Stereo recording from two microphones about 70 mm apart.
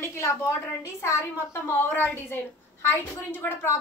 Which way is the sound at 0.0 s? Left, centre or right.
Left.